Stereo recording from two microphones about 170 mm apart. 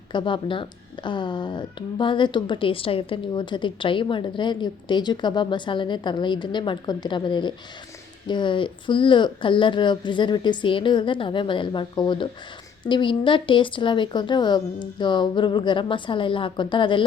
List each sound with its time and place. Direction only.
0.1 s speech: 30° left (ahead or behind)